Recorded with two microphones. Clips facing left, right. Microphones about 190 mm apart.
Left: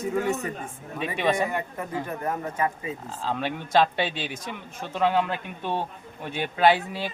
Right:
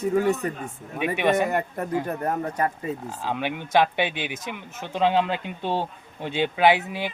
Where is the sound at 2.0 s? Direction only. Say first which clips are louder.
Right 3 dB; 40° right (ahead or behind).